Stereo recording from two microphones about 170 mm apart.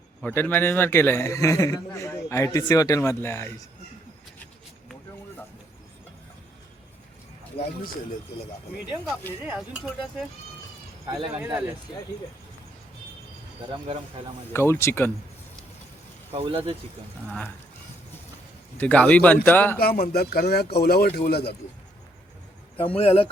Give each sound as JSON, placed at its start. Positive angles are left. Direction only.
{"t": 0.2, "sound": "a man's voice", "side_deg": 10}
{"t": 7.6, "sound": "speech", "side_deg": 35}
{"t": 9.4, "sound": "speech", "side_deg": -10}
{"t": 11.3, "sound": "speech", "side_deg": -5}
{"t": 14.5, "sound": "a man's voice", "side_deg": 15}
{"t": 16.3, "sound": "speech", "side_deg": -35}
{"t": 18.8, "sound": "a man's voice", "side_deg": 5}
{"t": 19.8, "sound": "speech", "side_deg": 65}
{"t": 23.0, "sound": "speech", "side_deg": 35}